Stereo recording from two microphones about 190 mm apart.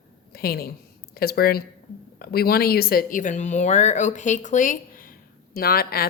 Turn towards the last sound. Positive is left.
turn(degrees=55)  # may be behind; listen again after turning